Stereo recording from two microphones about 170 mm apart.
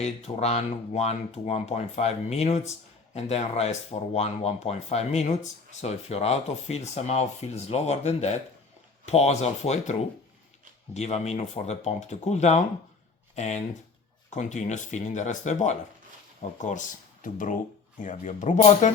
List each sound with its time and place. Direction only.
0.0 s speech: 40° left (ahead or behind)